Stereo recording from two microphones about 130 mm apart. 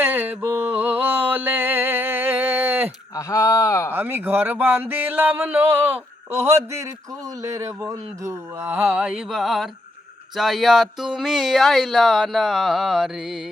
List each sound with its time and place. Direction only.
0.0 s mantra: 15° right (ahead or behind)
3.2 s speech: 25° left (ahead or behind)
3.9 s speech: 15° right (ahead or behind)